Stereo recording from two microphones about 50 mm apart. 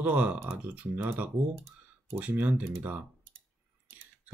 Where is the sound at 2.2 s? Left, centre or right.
Right.